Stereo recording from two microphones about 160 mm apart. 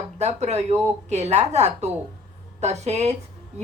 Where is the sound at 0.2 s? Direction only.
45° right (ahead or behind).